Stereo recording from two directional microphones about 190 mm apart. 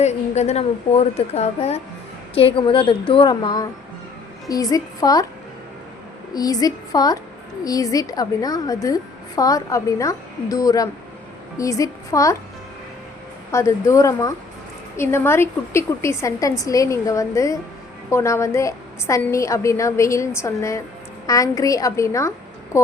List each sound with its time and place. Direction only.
0.0 s a woman's voice: 35° left (ahead or behind); by 5.2 s 20° left (ahead or behind)
6.3 s a woman's voice: 20° left (ahead or behind)
13.5 s a woman's voice: 15° left (ahead or behind)